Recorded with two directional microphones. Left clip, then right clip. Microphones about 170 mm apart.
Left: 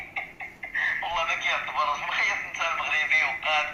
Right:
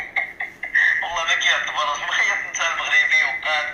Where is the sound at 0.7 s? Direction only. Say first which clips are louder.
Right 8 dB; 30° right (ahead or behind).